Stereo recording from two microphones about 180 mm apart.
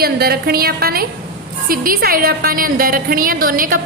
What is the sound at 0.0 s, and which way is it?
A woman's voice, 60° right (ahead or behind).